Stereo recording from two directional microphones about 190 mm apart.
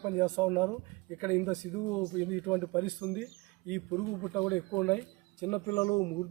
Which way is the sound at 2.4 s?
5° right (ahead or behind).